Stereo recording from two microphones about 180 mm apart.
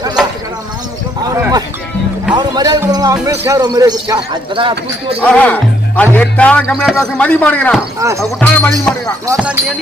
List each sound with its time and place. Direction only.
1.2 s a sound: 20° right (ahead or behind)
2.3 s speech: 25° right (ahead or behind)
5.2 s a man's voice: 5° left (ahead or behind)
7.9 s speech: 15° right (ahead or behind)
8.2 s a man's voice: 10° left (ahead or behind)